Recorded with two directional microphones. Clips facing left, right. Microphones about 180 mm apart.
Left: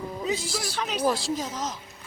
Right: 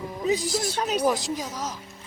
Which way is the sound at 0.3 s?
15° right (ahead or behind).